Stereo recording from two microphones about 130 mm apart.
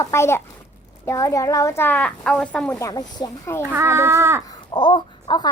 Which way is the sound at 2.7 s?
25° left (ahead or behind).